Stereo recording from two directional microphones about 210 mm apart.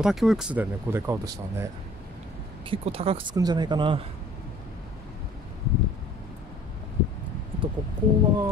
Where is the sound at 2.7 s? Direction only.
25° right (ahead or behind).